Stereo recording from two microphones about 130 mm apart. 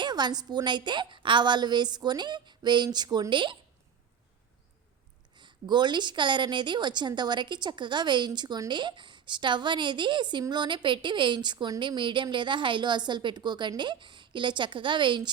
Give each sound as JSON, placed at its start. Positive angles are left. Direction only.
{"t": 0.0, "sound": "a woman's voice", "side_deg": -35}
{"t": 5.3, "sound": "a woman's voice", "side_deg": -35}